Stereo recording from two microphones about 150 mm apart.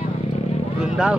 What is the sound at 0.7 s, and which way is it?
Speech, 5° right (ahead or behind).